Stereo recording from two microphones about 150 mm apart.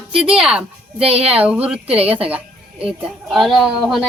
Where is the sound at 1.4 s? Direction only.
10° right (ahead or behind).